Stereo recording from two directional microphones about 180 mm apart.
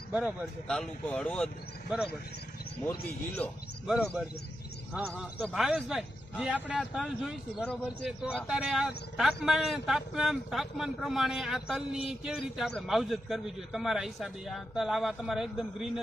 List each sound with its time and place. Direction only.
0.1 s a man's voice: 5° right (ahead or behind)
0.7 s speech: 5° left (ahead or behind)
3.3 s speech: 5° left (ahead or behind)
4.9 s speech: 5° right (ahead or behind)